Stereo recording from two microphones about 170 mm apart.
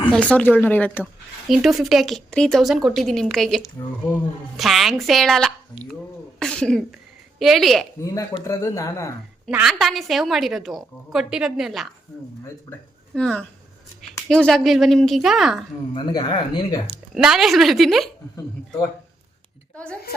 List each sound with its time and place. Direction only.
0.1 s speech: 10° left (ahead or behind)
1.5 s a woman's voice: centre (ahead or behind)
4.5 s a woman's voice: centre (ahead or behind)
8.0 s speech: 20° left (ahead or behind)
9.5 s a woman's voice: 5° right (ahead or behind)
16.0 s speech: 25° left (ahead or behind)
17.2 s a woman's voice: centre (ahead or behind)
19.7 s a woman's voice: 5° left (ahead or behind)